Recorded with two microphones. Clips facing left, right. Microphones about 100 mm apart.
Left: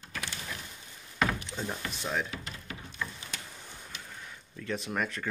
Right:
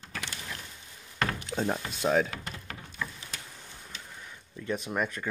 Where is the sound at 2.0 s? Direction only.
45° right (ahead or behind).